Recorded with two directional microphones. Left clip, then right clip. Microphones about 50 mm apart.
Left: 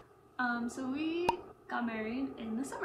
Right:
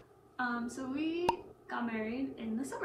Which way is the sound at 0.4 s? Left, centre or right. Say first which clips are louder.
Left 2 dB; left.